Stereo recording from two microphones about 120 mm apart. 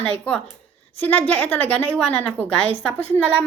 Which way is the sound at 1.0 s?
10° left (ahead or behind).